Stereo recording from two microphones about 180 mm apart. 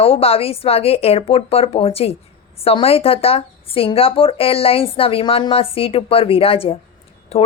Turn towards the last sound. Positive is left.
turn(degrees=35)  # may be behind; listen again after turning